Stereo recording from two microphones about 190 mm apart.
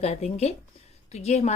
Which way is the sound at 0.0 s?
35° left (ahead or behind).